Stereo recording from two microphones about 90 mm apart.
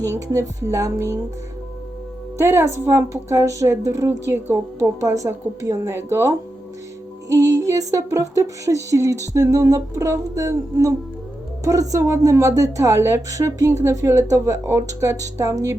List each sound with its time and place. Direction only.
0.0 s a woman's voice: 35° right (ahead or behind)
2.4 s a woman's voice: 25° right (ahead or behind)